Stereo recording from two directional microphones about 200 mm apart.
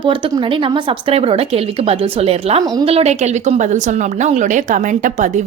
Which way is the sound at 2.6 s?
20° right (ahead or behind).